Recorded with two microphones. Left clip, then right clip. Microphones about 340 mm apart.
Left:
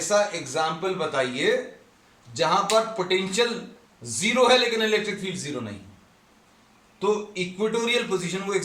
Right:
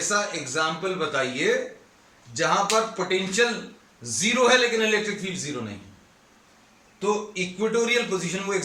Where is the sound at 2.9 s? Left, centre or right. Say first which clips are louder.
Even; centre.